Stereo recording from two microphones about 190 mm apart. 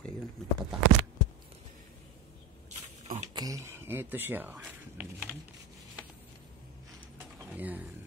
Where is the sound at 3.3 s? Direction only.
20° right (ahead or behind).